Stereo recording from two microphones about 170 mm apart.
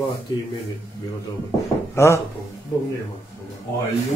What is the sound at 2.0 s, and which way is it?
Speech, 15° left (ahead or behind).